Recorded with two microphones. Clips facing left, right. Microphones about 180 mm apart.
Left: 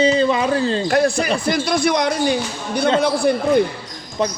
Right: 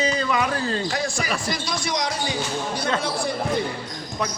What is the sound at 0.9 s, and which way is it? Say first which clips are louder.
A man's voice: left 9 dB; 60° left (ahead or behind).